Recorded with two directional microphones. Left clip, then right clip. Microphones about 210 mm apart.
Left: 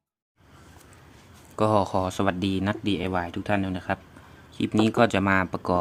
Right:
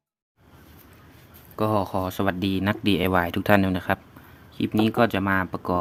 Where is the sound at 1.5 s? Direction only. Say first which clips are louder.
Left 2 dB; 5° left (ahead or behind).